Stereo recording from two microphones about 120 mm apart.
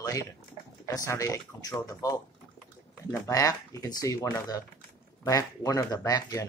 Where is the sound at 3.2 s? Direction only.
30° left (ahead or behind).